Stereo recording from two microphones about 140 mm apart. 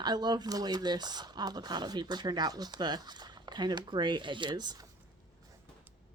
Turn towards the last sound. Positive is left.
turn(degrees=-30)  # may be behind; listen again after turning